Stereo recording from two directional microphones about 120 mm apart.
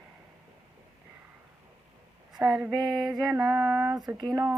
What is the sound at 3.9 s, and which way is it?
Speech, 35° right (ahead or behind).